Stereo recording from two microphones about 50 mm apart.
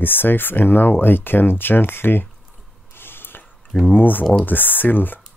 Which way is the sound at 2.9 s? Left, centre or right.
Left.